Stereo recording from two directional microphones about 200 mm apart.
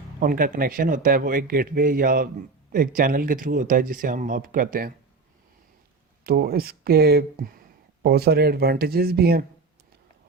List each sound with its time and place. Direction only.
0.2 s speech: 45° right (ahead or behind)
6.2 s speech: 50° right (ahead or behind)